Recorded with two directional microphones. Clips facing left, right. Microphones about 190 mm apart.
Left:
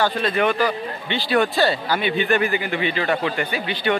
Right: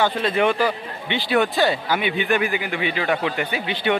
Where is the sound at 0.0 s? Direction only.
25° right (ahead or behind).